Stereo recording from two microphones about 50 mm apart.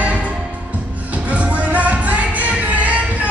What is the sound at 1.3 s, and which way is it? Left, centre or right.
Music, right.